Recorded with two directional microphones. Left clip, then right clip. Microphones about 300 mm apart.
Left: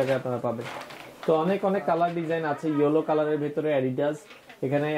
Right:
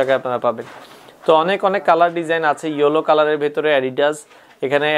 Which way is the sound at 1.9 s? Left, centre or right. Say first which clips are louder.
Right 10 dB; centre.